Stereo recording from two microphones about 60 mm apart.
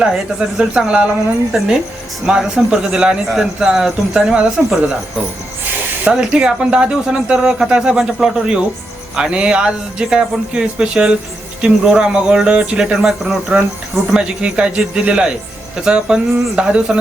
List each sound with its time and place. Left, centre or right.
0.0 s a man's voice: centre
2.2 s a man's voice: centre
6.1 s a man's voice: centre